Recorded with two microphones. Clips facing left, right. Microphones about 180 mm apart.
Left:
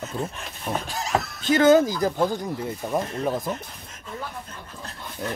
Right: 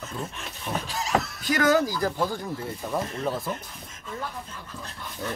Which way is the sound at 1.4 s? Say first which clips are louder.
Left 7 dB; 25° left (ahead or behind).